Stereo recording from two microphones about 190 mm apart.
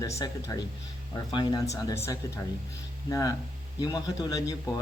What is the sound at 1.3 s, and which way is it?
A man's voice, 20° left (ahead or behind).